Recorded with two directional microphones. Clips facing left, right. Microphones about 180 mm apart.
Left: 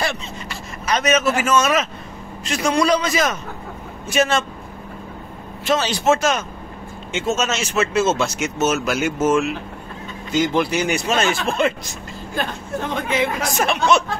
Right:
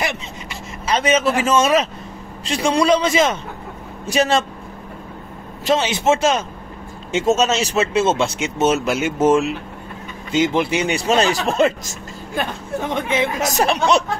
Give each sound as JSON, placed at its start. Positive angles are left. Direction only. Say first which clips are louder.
{"t": 0.0, "sound": "a man's voice", "louder": "even", "side_deg": -20}
{"t": 5.8, "sound": "a man's voice", "louder": "left 1 dB", "side_deg": -20}
{"t": 12.4, "sound": "a man's voice", "louder": "right 1 dB", "side_deg": -20}
{"t": 13.5, "sound": "speech", "louder": "right 1 dB", "side_deg": -35}